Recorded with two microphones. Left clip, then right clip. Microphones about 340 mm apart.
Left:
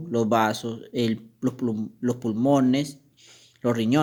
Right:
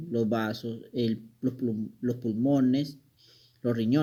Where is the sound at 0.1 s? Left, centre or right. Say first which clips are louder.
Left 7 dB; left.